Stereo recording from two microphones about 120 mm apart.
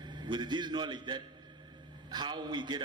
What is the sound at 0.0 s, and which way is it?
A man's voice, 40° right (ahead or behind).